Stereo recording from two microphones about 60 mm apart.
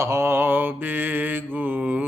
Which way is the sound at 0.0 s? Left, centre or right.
Right.